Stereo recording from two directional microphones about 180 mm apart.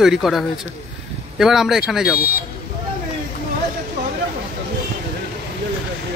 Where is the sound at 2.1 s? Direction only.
55° left (ahead or behind).